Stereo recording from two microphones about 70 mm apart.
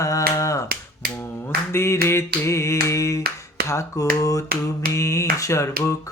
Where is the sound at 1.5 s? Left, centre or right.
Left.